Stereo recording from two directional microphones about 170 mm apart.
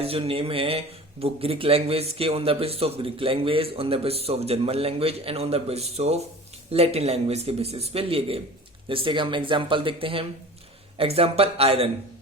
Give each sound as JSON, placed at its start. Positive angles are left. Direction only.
{"t": 0.0, "sound": "speech", "side_deg": -35}